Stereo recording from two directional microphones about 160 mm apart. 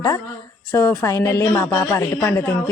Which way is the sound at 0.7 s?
10° left (ahead or behind).